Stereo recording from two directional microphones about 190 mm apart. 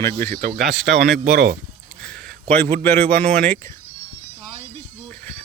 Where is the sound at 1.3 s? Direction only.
55° right (ahead or behind).